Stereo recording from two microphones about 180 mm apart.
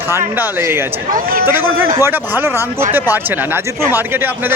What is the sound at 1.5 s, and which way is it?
Speech, 10° right (ahead or behind).